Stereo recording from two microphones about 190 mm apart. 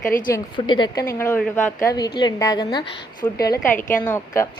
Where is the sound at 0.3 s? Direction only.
25° left (ahead or behind).